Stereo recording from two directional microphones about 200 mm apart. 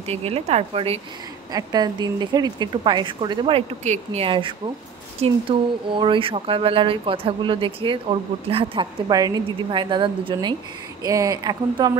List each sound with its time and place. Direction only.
0.0 s a woman's voice: 30° right (ahead or behind)
1.5 s speech: 20° right (ahead or behind)